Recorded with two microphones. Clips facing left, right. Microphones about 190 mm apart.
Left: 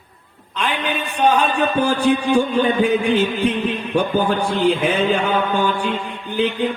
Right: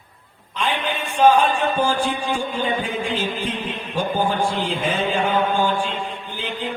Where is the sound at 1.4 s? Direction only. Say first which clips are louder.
Left 2 dB; 65° left (ahead or behind).